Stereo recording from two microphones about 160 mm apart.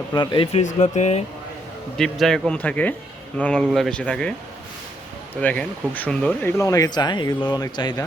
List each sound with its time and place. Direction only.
0.1 s speech: 25° left (ahead or behind)
0.5 s speech: 45° left (ahead or behind)
2.0 s speech: centre (ahead or behind)
5.4 s speech: 10° left (ahead or behind)
6.6 s speech: 20° left (ahead or behind)